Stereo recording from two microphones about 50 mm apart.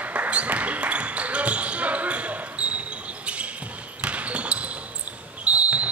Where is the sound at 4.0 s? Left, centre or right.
Right.